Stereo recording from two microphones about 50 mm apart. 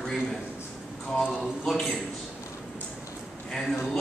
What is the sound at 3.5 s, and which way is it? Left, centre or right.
Speech, centre.